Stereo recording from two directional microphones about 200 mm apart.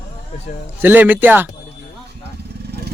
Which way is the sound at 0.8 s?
10° right (ahead or behind).